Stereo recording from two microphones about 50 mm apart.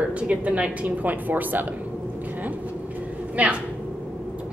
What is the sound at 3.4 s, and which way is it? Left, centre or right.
Speech, right.